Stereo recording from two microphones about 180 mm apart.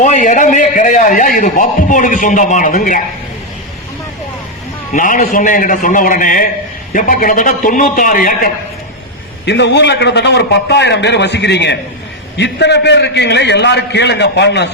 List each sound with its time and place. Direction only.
0.0 s a man's voice: 45° left (ahead or behind)
4.9 s a man's voice: 45° left (ahead or behind)
9.5 s a man's voice: 70° left (ahead or behind)